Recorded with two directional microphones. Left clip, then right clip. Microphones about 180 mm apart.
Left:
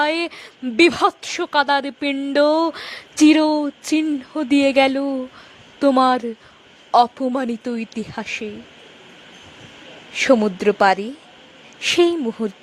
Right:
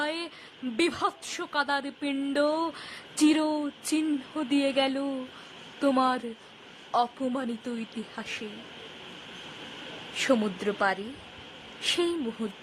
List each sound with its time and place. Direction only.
0.0 s speech: 40° left (ahead or behind)
10.2 s speech: 35° left (ahead or behind)